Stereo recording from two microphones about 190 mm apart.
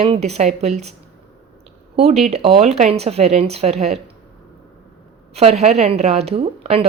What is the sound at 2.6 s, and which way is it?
A woman's voice, 35° right (ahead or behind).